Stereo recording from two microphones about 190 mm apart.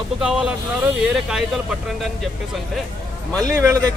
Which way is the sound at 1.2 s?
5° right (ahead or behind).